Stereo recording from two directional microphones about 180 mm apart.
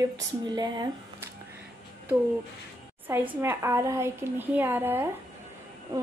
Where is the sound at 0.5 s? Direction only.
25° right (ahead or behind).